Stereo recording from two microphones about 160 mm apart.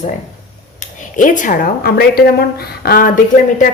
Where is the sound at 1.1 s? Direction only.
55° left (ahead or behind); by 2.4 s 75° left (ahead or behind).